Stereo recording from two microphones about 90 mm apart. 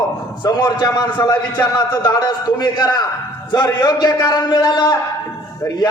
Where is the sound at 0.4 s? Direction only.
50° left (ahead or behind).